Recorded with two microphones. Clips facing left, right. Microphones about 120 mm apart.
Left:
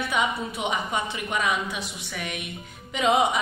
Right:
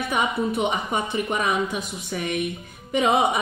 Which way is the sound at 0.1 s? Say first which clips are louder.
Right 5 dB; 55° right (ahead or behind).